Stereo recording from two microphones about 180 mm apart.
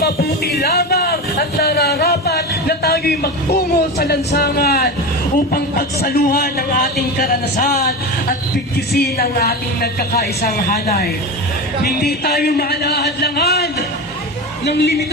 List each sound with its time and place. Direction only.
0.0 s a man's voice: 60° left (ahead or behind)
9.0 s a woman's voice: 60° left (ahead or behind)